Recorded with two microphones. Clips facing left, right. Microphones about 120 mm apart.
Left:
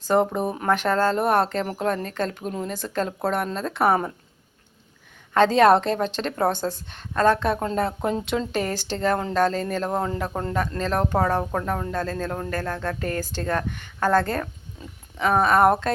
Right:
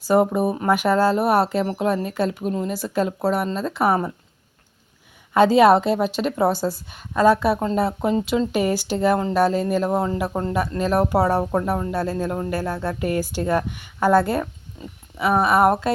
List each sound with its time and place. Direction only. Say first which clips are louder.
0.0 s speech: right 3 dB; 5° right (ahead or behind)
5.3 s a woman's voice: right 2 dB; 10° right (ahead or behind)